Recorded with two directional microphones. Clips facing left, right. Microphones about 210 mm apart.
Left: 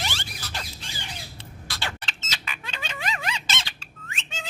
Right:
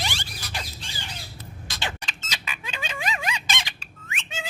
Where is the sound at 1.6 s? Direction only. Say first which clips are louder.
Right 1 dB; 20° right (ahead or behind).